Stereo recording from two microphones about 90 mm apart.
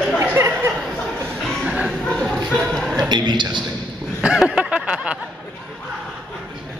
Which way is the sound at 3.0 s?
55° right (ahead or behind).